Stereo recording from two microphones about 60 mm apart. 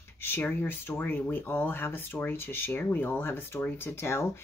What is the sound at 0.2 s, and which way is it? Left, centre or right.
Speech, left.